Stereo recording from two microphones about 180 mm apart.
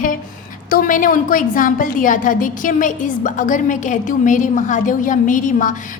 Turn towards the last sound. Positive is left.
turn(degrees=45)  # may be behind; listen again after turning